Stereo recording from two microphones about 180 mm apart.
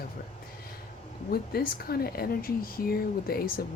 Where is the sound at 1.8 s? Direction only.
55° left (ahead or behind).